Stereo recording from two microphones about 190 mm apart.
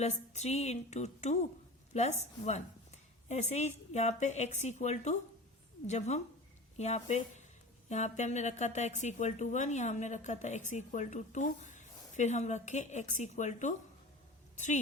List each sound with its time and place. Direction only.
0.0 s a woman's voice: 35° left (ahead or behind)